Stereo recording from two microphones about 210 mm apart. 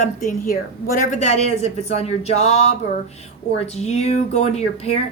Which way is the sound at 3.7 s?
30° left (ahead or behind).